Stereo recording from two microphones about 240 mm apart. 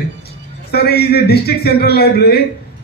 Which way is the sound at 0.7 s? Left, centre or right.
Left.